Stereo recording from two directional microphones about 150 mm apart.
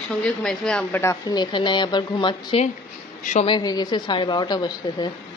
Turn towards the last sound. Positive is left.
turn(degrees=30)  # may be behind; listen again after turning